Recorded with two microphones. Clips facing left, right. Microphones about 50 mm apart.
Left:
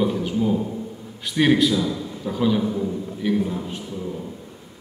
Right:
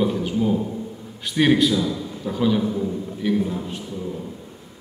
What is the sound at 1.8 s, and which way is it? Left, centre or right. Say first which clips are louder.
A man's voice: even; centre.